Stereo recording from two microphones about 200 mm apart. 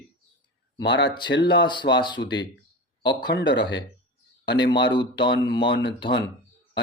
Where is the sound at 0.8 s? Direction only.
60° left (ahead or behind).